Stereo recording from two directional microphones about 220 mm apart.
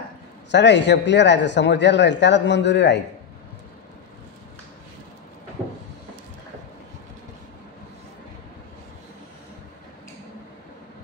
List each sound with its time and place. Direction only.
0.5 s speech: 55° left (ahead or behind)